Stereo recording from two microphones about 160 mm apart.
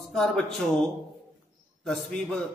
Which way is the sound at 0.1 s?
5° left (ahead or behind).